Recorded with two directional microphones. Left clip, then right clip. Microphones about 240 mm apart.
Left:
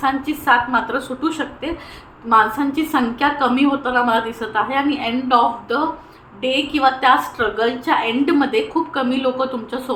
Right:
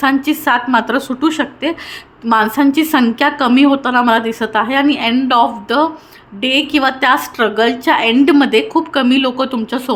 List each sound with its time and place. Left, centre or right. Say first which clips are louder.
0.0 s a woman's voice: right 5 dB; right